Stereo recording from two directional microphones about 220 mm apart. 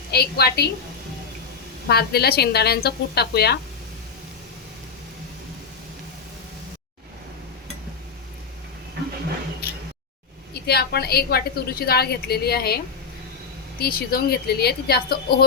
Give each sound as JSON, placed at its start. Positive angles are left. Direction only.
{"t": 0.1, "sound": "a woman's voice", "side_deg": 45}
{"t": 1.9, "sound": "a woman's voice", "side_deg": 45}
{"t": 10.7, "sound": "a woman's voice", "side_deg": 45}